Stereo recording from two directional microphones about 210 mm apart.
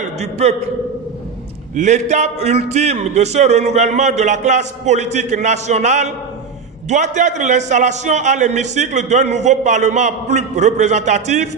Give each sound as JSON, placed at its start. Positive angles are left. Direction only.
{"t": 0.0, "sound": "a man's voice", "side_deg": -30}
{"t": 1.8, "sound": "a man's voice", "side_deg": -35}